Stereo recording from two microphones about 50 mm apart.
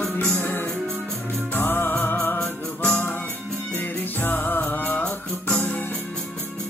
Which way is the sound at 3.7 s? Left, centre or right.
Left.